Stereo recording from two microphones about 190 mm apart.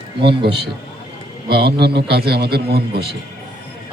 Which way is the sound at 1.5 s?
60° right (ahead or behind).